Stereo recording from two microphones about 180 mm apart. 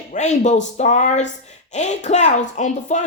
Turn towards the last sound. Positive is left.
turn(degrees=40)  # may be behind; listen again after turning